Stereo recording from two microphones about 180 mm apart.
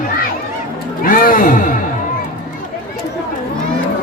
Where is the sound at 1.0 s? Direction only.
50° left (ahead or behind).